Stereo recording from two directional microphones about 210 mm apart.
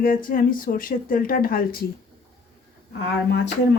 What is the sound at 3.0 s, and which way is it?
Speech, 55° left (ahead or behind).